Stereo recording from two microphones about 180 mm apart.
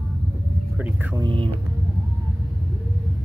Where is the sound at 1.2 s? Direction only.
30° right (ahead or behind).